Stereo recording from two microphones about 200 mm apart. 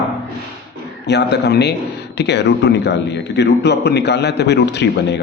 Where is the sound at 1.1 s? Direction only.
60° left (ahead or behind).